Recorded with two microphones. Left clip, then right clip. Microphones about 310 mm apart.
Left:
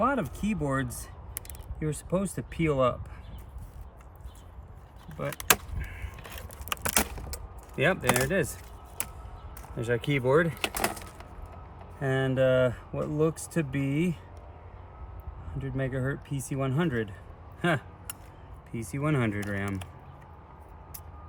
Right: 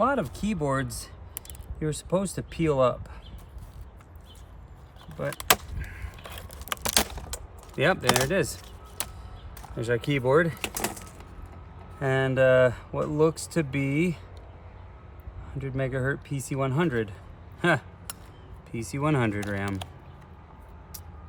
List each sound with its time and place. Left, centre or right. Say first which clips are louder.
0.0 s speech: right 2 dB; centre
1.8 s speech: right 3 dB; centre
5.1 s keys jangling: right 2 dB; centre
7.8 s speech: right 2 dB; centre
9.7 s speech: right 2 dB; centre
11.9 s speech: right 3 dB; centre
15.6 s speech: right 4 dB; centre